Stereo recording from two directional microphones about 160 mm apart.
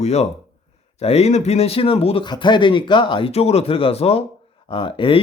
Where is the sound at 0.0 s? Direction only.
45° left (ahead or behind).